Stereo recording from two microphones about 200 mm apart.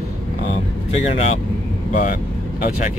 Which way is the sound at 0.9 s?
30° left (ahead or behind).